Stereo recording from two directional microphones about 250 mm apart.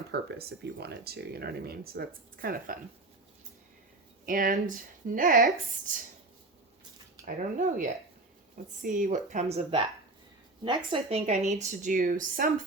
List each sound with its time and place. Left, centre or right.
0.1 s speech: right
4.3 s speech: right
7.3 s a woman's voice: right
10.9 s a woman's voice: right